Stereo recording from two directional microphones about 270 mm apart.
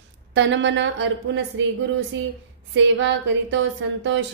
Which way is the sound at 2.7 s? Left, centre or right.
Right.